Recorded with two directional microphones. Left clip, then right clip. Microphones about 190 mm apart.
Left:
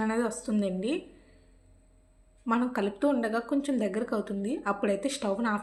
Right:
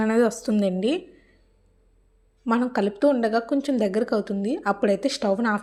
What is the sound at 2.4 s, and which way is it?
Speech, 30° right (ahead or behind).